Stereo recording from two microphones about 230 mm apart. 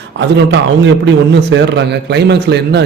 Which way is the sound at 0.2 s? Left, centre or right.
Right.